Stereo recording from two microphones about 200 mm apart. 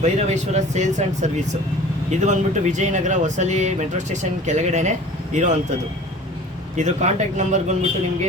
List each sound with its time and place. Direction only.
0.0 s speech: 35° right (ahead or behind)
6.7 s speech: 35° right (ahead or behind)